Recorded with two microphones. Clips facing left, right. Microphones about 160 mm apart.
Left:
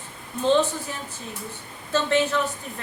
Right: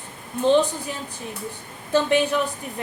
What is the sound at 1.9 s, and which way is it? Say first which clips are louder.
Speech: right 2 dB; 15° right (ahead or behind).